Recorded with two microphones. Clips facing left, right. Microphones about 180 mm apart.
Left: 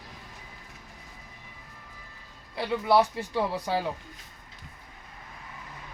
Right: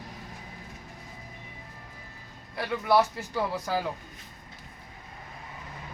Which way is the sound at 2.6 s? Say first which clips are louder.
Left 1 dB; 20° left (ahead or behind).